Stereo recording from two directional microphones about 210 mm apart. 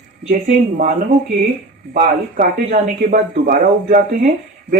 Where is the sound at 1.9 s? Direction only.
35° right (ahead or behind).